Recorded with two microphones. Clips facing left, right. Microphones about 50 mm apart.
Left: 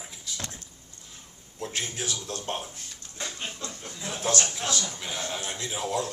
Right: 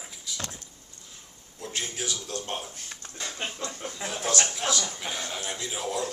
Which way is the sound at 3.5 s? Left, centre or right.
Right.